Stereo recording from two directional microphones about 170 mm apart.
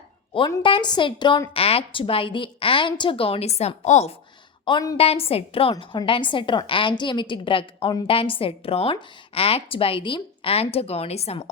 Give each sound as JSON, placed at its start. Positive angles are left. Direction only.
{"t": 0.6, "sound": "a woman's voice", "side_deg": 30}
{"t": 4.6, "sound": "a woman's voice", "side_deg": 25}